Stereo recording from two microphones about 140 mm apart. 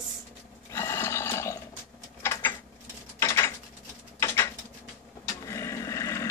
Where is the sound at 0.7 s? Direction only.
20° left (ahead or behind).